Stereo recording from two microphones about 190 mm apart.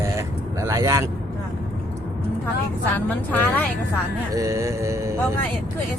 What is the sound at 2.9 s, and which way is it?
Speech, 10° left (ahead or behind).